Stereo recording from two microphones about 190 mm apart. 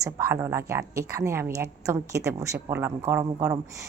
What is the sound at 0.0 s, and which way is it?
A woman's voice, 15° right (ahead or behind).